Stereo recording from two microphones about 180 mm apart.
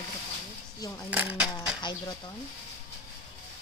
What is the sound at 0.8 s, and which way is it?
Speech, 20° left (ahead or behind).